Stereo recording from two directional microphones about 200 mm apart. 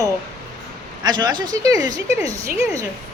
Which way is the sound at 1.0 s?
20° right (ahead or behind).